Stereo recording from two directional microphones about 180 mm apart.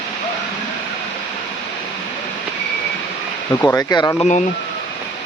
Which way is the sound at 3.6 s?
15° left (ahead or behind).